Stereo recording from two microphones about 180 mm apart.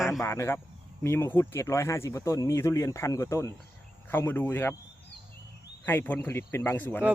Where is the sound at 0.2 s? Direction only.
15° left (ahead or behind).